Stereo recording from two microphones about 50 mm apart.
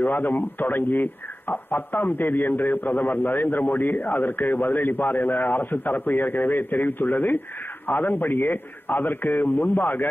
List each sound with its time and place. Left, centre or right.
0.0 s a man's voice: left